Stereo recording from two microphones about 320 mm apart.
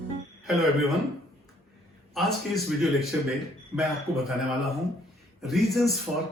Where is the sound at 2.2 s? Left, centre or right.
Centre.